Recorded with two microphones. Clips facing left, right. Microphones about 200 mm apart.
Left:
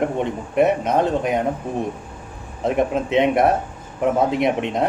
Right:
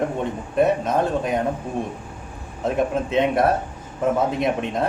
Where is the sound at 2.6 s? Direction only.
20° left (ahead or behind).